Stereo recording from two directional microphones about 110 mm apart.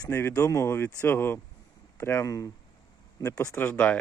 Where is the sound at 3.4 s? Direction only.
20° left (ahead or behind).